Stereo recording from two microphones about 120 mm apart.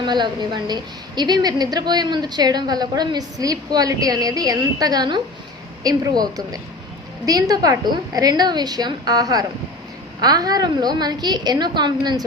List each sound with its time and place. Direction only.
0.0 s a woman's voice: 40° right (ahead or behind)